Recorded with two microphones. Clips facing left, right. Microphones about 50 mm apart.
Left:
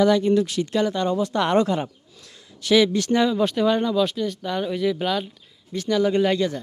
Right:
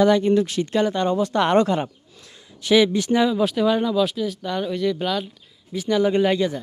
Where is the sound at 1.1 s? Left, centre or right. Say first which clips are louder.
Right 3 dB; right.